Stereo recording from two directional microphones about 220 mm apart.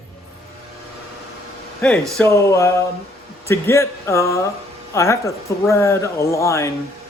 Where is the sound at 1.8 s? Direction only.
Centre (ahead or behind).